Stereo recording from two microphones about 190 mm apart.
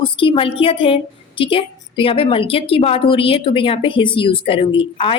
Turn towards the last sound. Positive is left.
turn(degrees=30)  # may be behind; listen again after turning